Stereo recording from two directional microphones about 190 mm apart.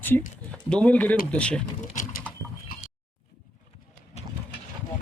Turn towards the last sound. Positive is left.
turn(degrees=35)  # may be behind; listen again after turning